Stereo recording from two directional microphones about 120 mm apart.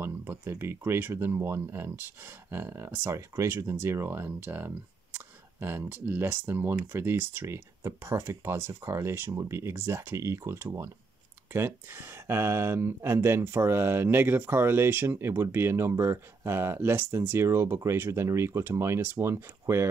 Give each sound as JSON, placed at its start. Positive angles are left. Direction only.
{"t": 0.0, "sound": "speech", "side_deg": -20}